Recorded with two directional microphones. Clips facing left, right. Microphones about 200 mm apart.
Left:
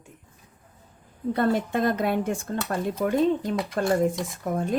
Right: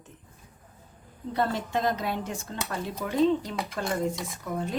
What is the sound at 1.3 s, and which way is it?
Speech, 55° left (ahead or behind).